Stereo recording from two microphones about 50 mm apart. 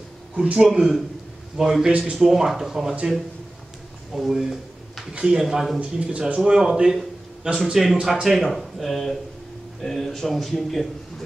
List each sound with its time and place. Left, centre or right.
0.4 s speech: right
0.7 s speech: centre
1.9 s speech: right
2.1 s speech: centre
4.1 s a sound: centre
5.2 s speech: centre
5.8 s speech: right; by 11.2 s centre